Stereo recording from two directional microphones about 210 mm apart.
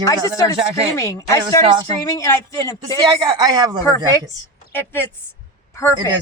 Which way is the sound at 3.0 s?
20° right (ahead or behind).